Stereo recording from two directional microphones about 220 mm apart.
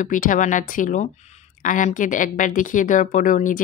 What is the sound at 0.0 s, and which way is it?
A woman's voice, 35° left (ahead or behind).